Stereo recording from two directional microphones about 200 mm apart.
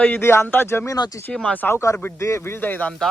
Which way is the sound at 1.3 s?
Centre (ahead or behind).